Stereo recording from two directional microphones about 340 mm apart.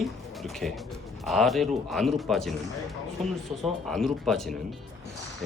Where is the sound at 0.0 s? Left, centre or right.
Centre.